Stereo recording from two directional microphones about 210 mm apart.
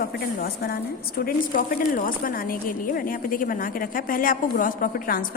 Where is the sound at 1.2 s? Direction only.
40° left (ahead or behind).